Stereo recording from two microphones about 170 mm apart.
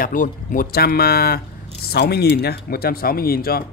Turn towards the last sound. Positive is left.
turn(degrees=60)  # may be behind; listen again after turning